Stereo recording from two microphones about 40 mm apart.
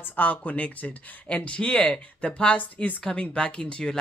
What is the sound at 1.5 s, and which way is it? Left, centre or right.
Speech, left.